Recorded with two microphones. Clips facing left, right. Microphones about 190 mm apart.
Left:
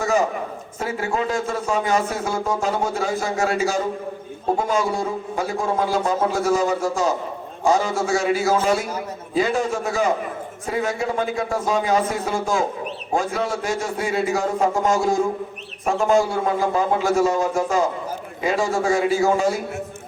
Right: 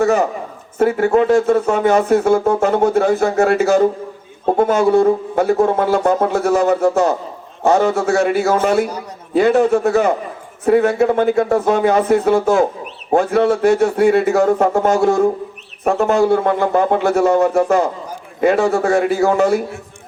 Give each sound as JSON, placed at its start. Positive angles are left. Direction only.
{"t": 0.0, "sound": "speech", "side_deg": -60}